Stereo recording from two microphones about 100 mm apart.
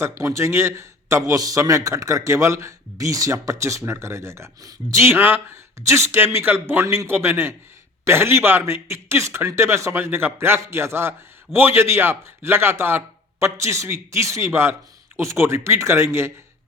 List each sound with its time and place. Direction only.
0.0 s a man's voice: 30° right (ahead or behind)